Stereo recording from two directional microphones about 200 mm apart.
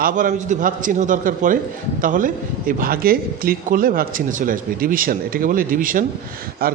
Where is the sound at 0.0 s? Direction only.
40° right (ahead or behind).